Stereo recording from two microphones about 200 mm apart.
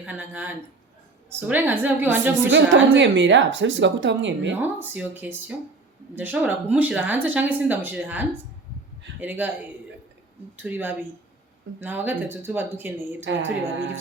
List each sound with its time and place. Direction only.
0.0 s speech: 10° right (ahead or behind)
2.3 s a woman's voice: 65° right (ahead or behind)
4.6 s speech: 10° right (ahead or behind)
10.6 s speech: 10° right (ahead or behind)